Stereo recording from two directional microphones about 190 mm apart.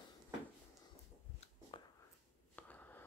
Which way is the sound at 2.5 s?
10° left (ahead or behind).